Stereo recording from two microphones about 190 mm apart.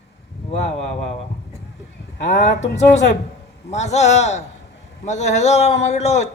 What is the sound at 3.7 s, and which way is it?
A man's voice, 35° left (ahead or behind).